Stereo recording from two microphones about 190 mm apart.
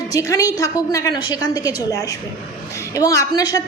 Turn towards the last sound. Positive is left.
turn(degrees=20)  # may be behind; listen again after turning